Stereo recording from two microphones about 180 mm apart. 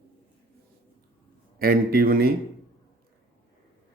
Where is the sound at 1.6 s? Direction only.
55° right (ahead or behind).